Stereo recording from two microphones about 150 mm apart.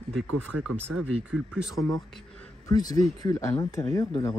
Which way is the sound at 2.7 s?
25° left (ahead or behind).